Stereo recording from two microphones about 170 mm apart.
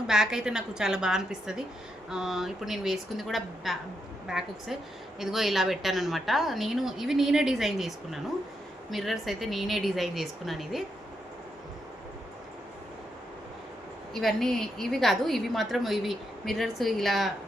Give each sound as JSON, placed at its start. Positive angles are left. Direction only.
{"t": 0.1, "sound": "a woman's voice", "side_deg": -5}
{"t": 14.1, "sound": "a woman's voice", "side_deg": 0}